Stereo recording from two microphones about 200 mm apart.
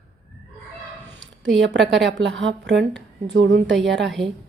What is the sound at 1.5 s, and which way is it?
A woman's voice, 60° right (ahead or behind).